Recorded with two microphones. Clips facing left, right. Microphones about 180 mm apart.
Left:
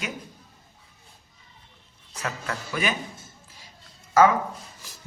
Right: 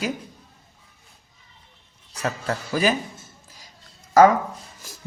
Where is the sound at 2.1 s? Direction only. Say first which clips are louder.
Right 5 dB; 35° right (ahead or behind).